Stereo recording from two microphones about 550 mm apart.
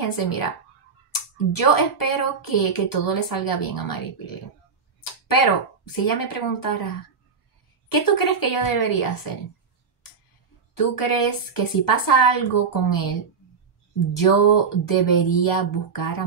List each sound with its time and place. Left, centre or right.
0.0 s speech: left
7.9 s speech: left
10.7 s speech: left